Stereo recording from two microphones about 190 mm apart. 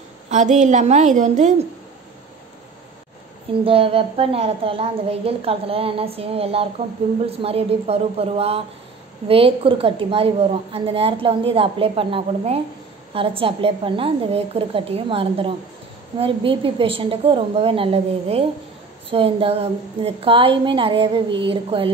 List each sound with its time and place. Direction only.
0.3 s a woman's voice: 40° right (ahead or behind)
3.6 s a woman's voice: 30° right (ahead or behind)